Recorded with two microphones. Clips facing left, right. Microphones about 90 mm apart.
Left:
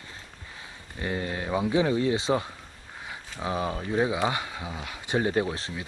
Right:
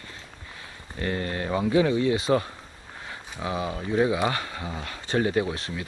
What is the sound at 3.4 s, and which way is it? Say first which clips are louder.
Speech: even; 30° left (ahead or behind).